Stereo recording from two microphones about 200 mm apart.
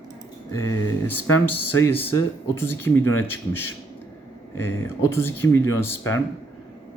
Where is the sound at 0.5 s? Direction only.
10° left (ahead or behind).